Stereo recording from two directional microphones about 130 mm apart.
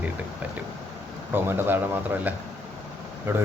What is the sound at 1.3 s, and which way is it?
Speech, 15° right (ahead or behind).